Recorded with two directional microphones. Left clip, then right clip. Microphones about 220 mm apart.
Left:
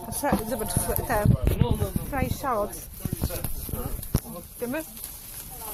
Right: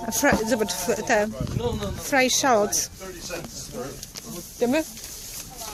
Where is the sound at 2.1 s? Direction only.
55° right (ahead or behind).